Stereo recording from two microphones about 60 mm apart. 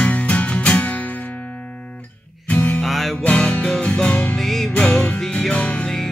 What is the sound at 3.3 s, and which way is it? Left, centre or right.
Music, left.